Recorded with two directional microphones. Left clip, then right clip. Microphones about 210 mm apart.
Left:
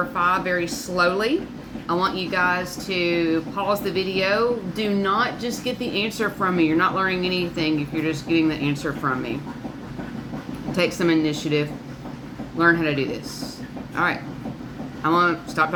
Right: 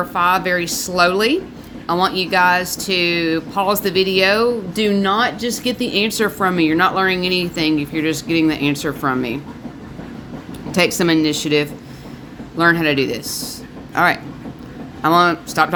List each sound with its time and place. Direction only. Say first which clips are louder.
0.1 s speech: right 8 dB; 55° right (ahead or behind)
10.7 s speech: right 5 dB; 55° right (ahead or behind)